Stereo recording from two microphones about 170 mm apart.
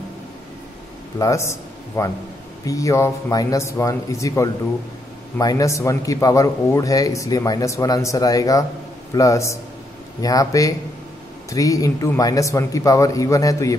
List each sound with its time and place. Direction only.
1.2 s a man's voice: 15° left (ahead or behind)